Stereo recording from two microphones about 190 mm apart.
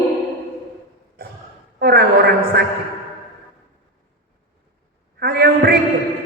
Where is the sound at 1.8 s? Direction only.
55° right (ahead or behind).